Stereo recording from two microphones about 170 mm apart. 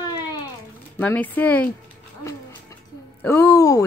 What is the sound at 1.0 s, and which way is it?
Speech, 10° left (ahead or behind).